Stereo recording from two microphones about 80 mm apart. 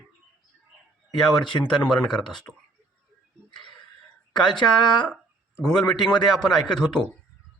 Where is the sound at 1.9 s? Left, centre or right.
Centre.